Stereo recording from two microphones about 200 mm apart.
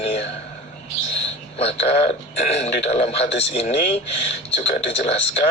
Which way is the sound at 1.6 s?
30° left (ahead or behind).